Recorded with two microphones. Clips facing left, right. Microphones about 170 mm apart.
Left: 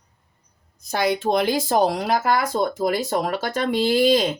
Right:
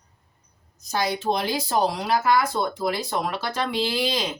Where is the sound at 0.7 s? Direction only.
55° left (ahead or behind).